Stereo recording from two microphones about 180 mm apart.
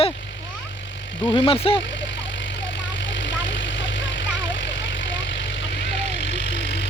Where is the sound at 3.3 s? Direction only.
90° left.